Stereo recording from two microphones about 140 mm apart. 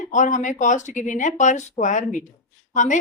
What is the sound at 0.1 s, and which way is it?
Speech, 65° left (ahead or behind).